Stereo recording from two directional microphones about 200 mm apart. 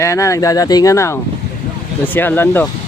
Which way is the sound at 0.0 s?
15° left (ahead or behind).